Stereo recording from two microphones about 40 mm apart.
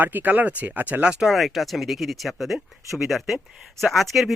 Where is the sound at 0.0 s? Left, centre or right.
Right.